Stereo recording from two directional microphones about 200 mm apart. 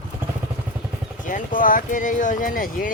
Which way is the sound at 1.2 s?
45° left (ahead or behind).